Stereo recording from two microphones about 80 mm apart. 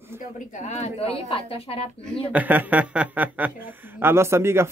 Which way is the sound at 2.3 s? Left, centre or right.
Right.